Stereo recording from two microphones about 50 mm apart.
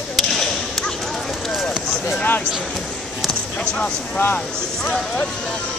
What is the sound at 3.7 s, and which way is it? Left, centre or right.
Speech, left.